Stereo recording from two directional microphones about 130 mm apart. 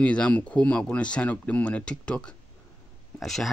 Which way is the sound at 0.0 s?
10° left (ahead or behind).